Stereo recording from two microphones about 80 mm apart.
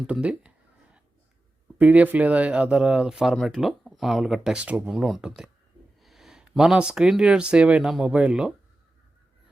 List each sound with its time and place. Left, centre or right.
0.1 s speech: centre
1.8 s speech: centre